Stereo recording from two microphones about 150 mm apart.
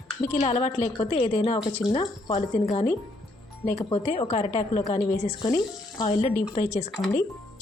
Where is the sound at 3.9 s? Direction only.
40° left (ahead or behind).